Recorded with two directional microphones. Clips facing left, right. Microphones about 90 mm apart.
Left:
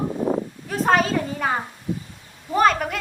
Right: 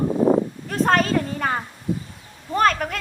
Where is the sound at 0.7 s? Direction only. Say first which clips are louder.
Left 1 dB; 5° left (ahead or behind).